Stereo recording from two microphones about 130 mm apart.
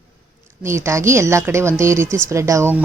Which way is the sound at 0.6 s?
20° right (ahead or behind).